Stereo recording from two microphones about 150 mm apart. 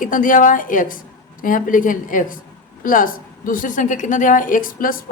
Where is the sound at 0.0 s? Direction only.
60° left (ahead or behind).